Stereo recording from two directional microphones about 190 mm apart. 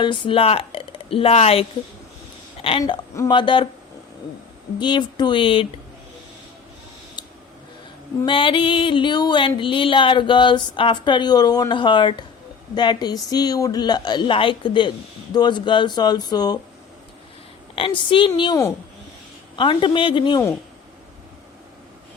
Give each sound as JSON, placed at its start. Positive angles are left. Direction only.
{"t": 0.0, "sound": "speech", "side_deg": 25}
{"t": 2.6, "sound": "music", "side_deg": 30}
{"t": 4.8, "sound": "music", "side_deg": 25}
{"t": 7.2, "sound": "a sound", "side_deg": 25}
{"t": 8.2, "sound": "music", "side_deg": 25}
{"t": 17.7, "sound": "music", "side_deg": 25}